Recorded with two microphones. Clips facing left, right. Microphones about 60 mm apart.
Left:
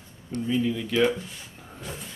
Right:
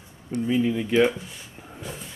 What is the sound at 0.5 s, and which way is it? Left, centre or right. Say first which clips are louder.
Speech: right 3 dB; right.